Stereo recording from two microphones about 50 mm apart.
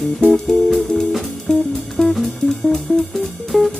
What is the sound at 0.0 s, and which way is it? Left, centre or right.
Music, centre.